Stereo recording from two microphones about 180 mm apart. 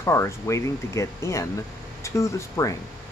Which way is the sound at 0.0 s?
15° left (ahead or behind).